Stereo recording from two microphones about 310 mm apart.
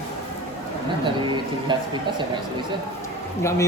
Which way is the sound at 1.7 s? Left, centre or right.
Centre.